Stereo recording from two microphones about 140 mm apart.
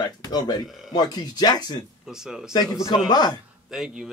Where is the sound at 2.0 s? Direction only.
5° right (ahead or behind).